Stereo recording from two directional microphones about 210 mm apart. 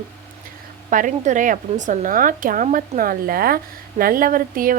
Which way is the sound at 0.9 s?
40° right (ahead or behind).